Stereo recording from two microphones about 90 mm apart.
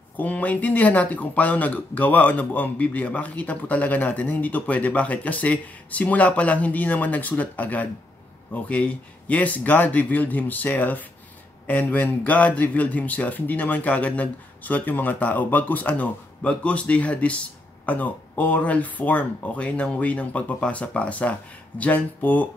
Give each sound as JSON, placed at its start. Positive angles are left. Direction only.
{"t": 0.2, "sound": "speech", "side_deg": 15}